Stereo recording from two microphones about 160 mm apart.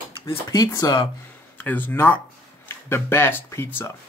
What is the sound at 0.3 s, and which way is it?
Speech, 20° left (ahead or behind).